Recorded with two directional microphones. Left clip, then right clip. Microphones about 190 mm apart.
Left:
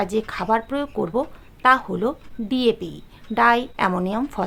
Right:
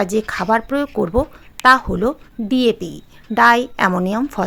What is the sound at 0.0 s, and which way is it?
Speech, 30° right (ahead or behind).